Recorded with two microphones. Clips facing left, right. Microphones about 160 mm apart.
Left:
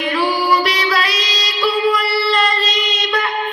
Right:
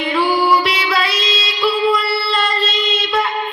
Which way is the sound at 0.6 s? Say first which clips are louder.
Even; 25° right (ahead or behind).